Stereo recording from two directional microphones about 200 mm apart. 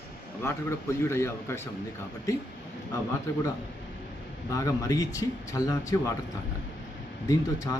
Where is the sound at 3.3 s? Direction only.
20° left (ahead or behind).